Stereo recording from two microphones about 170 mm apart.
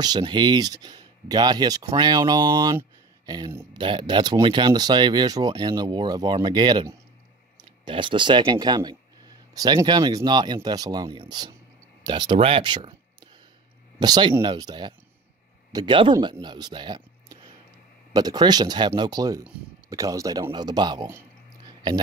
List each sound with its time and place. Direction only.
0.0 s speech: 25° right (ahead or behind)